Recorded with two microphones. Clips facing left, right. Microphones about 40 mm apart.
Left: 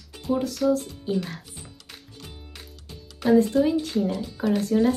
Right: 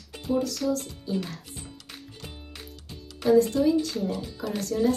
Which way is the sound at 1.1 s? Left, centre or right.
Left.